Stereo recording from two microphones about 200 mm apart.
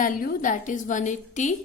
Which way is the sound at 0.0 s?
45° left (ahead or behind).